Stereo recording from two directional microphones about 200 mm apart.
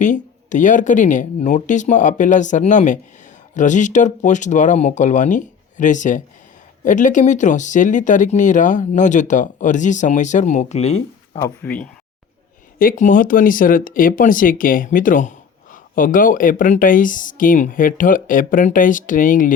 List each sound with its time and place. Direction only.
0.0 s speech: 40° left (ahead or behind)
11.3 s speech: 10° left (ahead or behind)
12.8 s speech: 40° left (ahead or behind)